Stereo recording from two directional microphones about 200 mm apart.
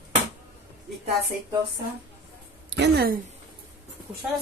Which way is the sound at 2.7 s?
55° right (ahead or behind).